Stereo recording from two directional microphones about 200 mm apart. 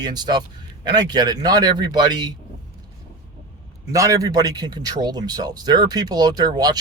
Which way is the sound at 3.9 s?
15° right (ahead or behind).